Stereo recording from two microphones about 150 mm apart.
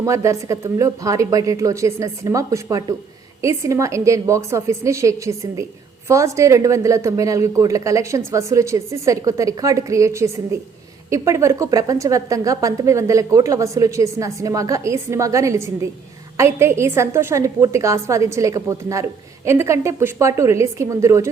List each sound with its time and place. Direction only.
0.0 s a woman's voice: 20° right (ahead or behind)